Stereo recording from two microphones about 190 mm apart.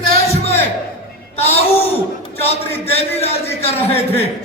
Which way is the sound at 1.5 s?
30° left (ahead or behind).